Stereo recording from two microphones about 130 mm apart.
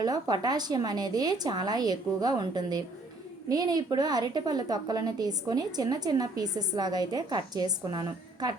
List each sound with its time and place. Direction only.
0.0 s a woman's voice: 30° right (ahead or behind)